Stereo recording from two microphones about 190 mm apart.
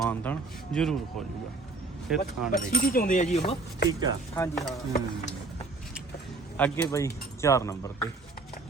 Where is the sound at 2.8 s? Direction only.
50° left (ahead or behind).